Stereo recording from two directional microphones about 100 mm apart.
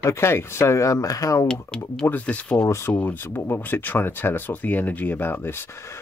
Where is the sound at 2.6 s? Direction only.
30° left (ahead or behind).